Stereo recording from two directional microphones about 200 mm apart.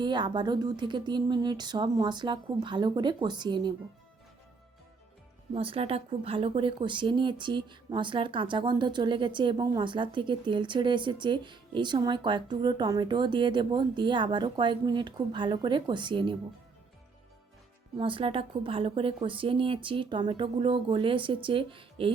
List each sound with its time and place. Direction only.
0.0 s speech: 20° right (ahead or behind)
5.5 s speech: 30° right (ahead or behind)
17.9 s speech: 25° right (ahead or behind)